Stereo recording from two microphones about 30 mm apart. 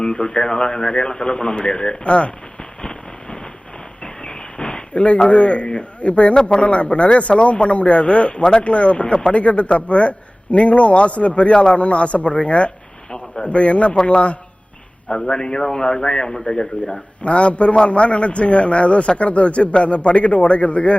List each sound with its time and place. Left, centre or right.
0.0 s speech: left
2.6 s vehicle: left
4.0 s a sound: left
5.3 s a man's voice: left
13.1 s a sound: left
13.4 s a man's voice: left
15.1 s speech: left
16.8 s a man's voice: left